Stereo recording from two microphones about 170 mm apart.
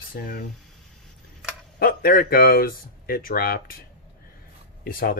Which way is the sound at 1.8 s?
60° left (ahead or behind).